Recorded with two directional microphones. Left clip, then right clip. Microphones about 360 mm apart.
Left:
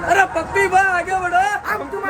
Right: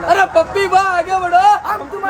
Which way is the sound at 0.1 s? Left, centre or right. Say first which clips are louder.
Right 4 dB; centre.